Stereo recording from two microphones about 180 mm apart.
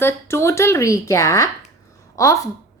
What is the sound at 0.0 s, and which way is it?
A woman's voice, 15° left (ahead or behind).